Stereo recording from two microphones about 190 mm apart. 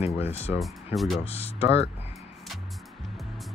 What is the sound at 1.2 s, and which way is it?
Speech, 30° left (ahead or behind).